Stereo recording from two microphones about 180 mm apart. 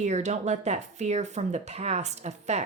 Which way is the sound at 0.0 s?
40° right (ahead or behind).